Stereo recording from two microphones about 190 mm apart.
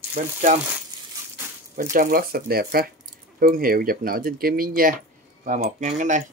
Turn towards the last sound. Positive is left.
turn(degrees=-40)  # may be behind; listen again after turning